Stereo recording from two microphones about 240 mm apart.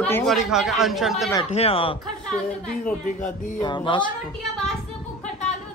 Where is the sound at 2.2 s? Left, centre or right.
Centre.